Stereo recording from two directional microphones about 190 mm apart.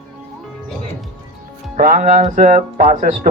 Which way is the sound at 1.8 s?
45° right (ahead or behind).